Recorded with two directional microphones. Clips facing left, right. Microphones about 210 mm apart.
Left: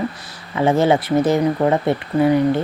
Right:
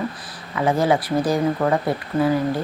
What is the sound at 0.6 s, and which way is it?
Speech, 25° left (ahead or behind).